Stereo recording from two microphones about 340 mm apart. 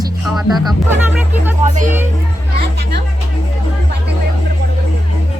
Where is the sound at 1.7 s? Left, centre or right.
Right.